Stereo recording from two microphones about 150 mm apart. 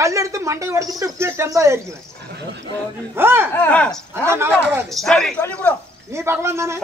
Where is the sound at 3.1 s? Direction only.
15° right (ahead or behind).